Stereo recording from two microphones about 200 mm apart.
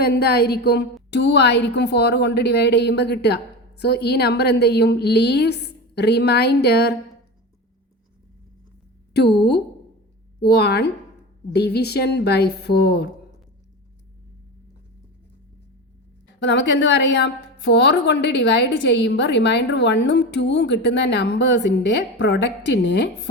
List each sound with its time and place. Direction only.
0.0 s a woman's voice: 50° left (ahead or behind)
9.1 s a woman's voice: 55° left (ahead or behind)
16.2 s a woman's voice: 60° left (ahead or behind)